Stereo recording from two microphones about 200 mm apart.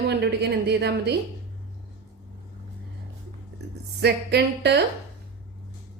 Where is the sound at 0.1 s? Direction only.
55° right (ahead or behind).